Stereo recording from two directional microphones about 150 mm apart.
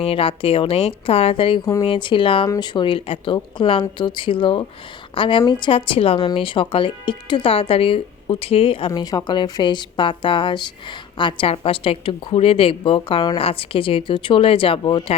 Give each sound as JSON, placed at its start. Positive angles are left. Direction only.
{"t": 0.0, "sound": "a woman's voice", "side_deg": 40}
{"t": 8.9, "sound": "a woman's voice", "side_deg": 25}